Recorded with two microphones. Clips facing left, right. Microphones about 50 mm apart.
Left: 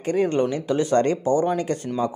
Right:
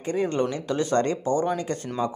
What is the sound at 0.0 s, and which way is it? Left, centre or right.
Speech, left.